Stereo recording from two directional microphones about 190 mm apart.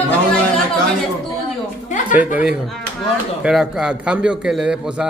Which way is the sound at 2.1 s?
5° right (ahead or behind).